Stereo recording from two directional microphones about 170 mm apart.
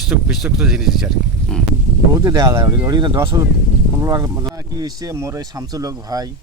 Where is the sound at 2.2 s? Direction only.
20° right (ahead or behind).